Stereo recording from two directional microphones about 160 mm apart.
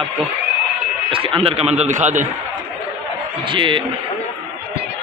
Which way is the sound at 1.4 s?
40° right (ahead or behind).